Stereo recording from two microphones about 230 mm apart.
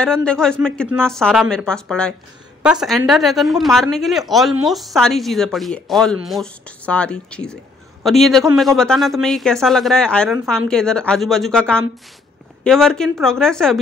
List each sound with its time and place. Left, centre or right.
0.0 s speech: centre